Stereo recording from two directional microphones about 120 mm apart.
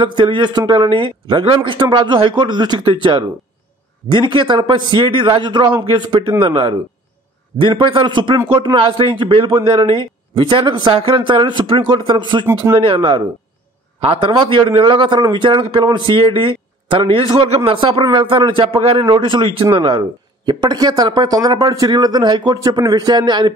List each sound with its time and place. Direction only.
0.0 s a man's voice: 45° right (ahead or behind)
14.3 s a man's voice: 45° right (ahead or behind)